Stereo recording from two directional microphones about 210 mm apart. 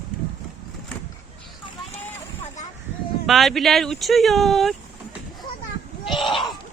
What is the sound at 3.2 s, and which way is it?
Speech, centre (ahead or behind).